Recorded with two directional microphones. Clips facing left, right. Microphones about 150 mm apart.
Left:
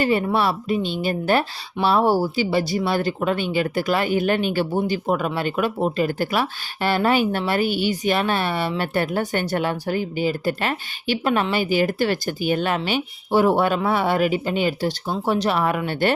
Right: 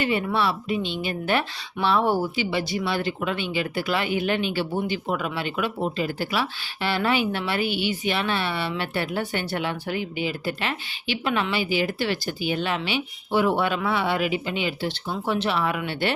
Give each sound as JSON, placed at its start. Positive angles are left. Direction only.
{"t": 0.0, "sound": "speech", "side_deg": 40}